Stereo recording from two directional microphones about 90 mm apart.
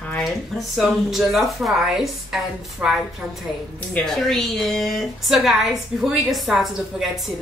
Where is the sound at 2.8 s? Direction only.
15° right (ahead or behind).